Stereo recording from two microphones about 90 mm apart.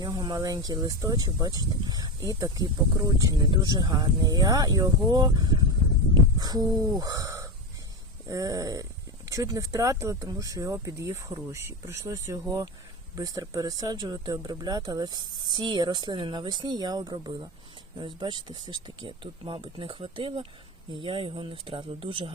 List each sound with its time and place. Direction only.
0.0 s speech: 45° right (ahead or behind); by 22.3 s 75° right (ahead or behind)